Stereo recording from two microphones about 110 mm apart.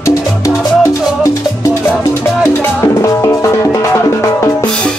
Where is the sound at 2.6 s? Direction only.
25° left (ahead or behind).